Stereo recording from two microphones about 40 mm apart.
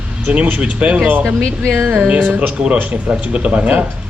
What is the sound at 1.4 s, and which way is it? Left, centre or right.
Speech, centre.